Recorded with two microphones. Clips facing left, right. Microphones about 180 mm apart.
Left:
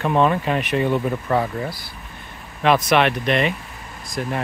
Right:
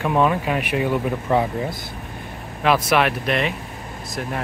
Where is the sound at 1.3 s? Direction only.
20° right (ahead or behind).